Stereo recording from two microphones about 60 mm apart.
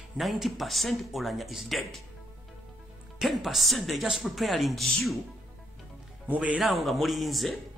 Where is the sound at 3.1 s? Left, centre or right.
Centre.